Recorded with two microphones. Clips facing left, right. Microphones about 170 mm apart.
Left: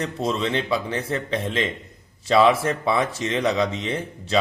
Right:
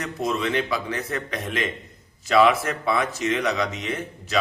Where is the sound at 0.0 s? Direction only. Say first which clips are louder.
Left 1 dB; 30° left (ahead or behind).